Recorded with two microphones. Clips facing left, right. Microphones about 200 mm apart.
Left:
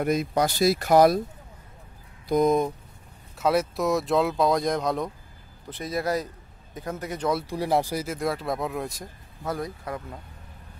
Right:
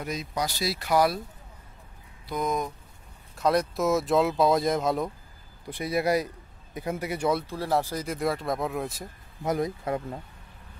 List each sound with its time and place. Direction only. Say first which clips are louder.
0.0 s speech: left 8 dB; 55° left (ahead or behind)
2.2 s speech: left 8 dB; 40° left (ahead or behind)
3.3 s a man's voice: left 1 dB; 5° left (ahead or behind)
7.4 s speech: left 2 dB; 15° left (ahead or behind); by 9.1 s centre (ahead or behind)
9.4 s speech: right 4 dB; 20° right (ahead or behind)